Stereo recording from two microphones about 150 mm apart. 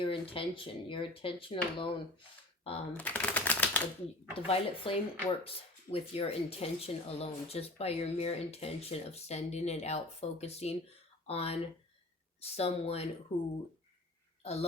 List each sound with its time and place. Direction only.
0.0 s speech: 35° left (ahead or behind)
2.9 s speech: 10° left (ahead or behind)
4.4 s speech: 40° left (ahead or behind)
13.3 s speech: 35° left (ahead or behind)
14.4 s a woman's voice: 45° left (ahead or behind)